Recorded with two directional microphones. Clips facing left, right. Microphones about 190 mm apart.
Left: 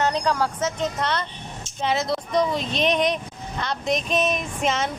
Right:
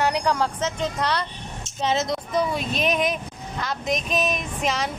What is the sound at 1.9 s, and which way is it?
Speech, 25° right (ahead or behind).